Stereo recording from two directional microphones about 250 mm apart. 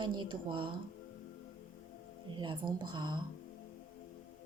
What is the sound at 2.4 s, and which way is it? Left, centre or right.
Speech, centre.